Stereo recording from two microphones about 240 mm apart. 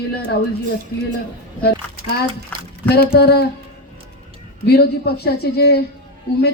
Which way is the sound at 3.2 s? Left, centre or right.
Left.